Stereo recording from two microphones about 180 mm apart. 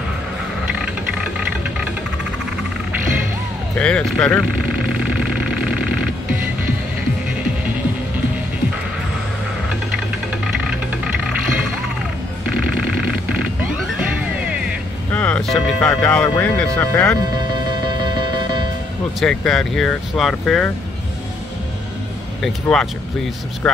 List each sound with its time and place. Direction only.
3.7 s speech: 5° left (ahead or behind)
4.6 s vehicle: 5° right (ahead or behind)
13.6 s music: 5° right (ahead or behind)
15.1 s music: 5° left (ahead or behind)
16.3 s speech: 10° left (ahead or behind)
17.2 s music: 25° right (ahead or behind)
19.1 s speech: centre (ahead or behind)
22.4 s speech: 5° left (ahead or behind)